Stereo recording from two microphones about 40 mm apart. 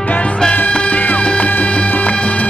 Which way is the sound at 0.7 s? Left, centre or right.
Left.